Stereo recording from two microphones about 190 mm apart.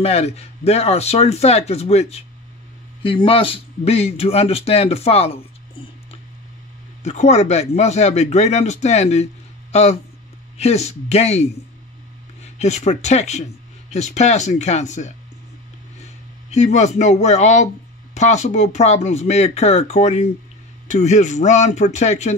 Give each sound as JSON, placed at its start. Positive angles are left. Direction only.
{"t": 0.0, "sound": "a man's voice", "side_deg": 35}
{"t": 7.0, "sound": "a man's voice", "side_deg": 35}
{"t": 12.5, "sound": "a man's voice", "side_deg": 35}